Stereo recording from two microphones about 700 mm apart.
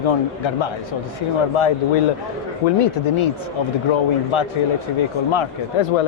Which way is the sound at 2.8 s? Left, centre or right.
Left.